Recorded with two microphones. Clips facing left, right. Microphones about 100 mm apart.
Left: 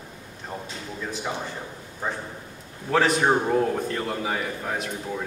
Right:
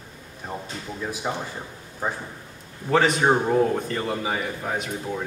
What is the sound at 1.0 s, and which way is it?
Speech, 15° right (ahead or behind).